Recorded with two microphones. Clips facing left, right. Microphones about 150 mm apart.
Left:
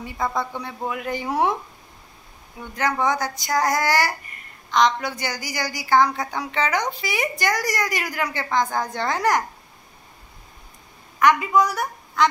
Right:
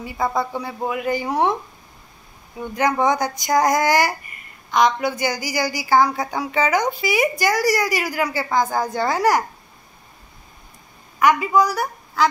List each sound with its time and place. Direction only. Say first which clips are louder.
0.0 s a woman's voice: right 3 dB; 5° right (ahead or behind)
2.7 s a woman's voice: right 4 dB; 15° right (ahead or behind)
11.1 s a woman's voice: right 1 dB; 5° right (ahead or behind)